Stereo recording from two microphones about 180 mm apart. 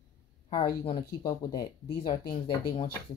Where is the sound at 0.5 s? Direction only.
30° left (ahead or behind).